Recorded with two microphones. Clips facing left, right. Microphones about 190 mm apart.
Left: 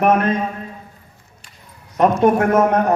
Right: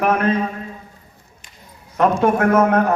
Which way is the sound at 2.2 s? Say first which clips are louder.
Left 1 dB; 20° left (ahead or behind).